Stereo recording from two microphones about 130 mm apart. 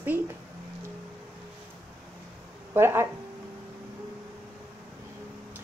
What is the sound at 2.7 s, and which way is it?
Speech, 15° right (ahead or behind).